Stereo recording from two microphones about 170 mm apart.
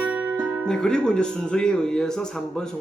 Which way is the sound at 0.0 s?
10° right (ahead or behind).